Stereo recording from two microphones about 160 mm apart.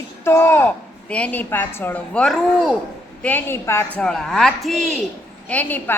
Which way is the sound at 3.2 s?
10° left (ahead or behind).